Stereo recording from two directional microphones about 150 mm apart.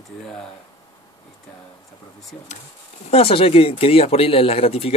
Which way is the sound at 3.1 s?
40° left (ahead or behind).